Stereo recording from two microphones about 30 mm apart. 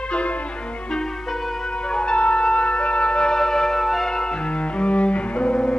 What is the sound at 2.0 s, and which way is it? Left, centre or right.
Music, left.